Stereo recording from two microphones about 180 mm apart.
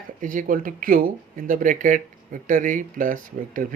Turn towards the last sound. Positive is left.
turn(degrees=-50)  # may be behind; listen again after turning